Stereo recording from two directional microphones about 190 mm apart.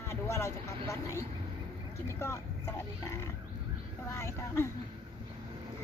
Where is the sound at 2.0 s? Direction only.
15° left (ahead or behind).